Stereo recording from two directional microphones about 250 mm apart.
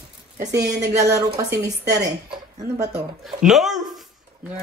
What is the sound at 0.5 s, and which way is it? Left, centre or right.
Speech, centre.